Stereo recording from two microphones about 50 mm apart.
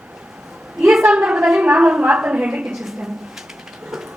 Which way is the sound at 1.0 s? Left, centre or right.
Centre.